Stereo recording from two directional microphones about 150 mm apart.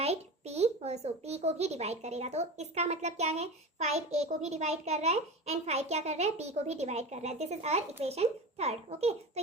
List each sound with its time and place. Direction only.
0.0 s a child's voice: 45° right (ahead or behind)